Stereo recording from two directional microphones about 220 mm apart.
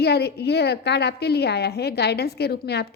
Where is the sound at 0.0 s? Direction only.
45° left (ahead or behind).